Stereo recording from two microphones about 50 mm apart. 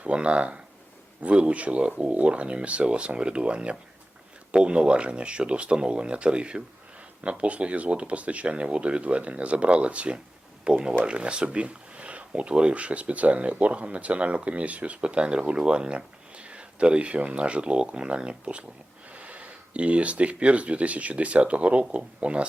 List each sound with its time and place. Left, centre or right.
0.0 s speech: right